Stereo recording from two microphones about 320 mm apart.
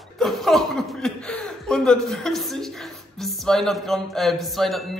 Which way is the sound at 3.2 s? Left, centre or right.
Centre.